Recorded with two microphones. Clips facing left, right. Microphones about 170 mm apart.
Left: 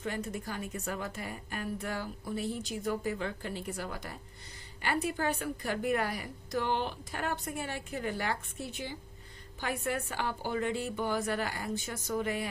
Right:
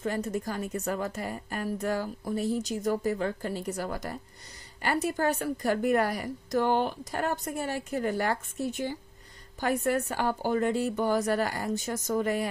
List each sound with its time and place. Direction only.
0.0 s a woman's voice: 40° right (ahead or behind)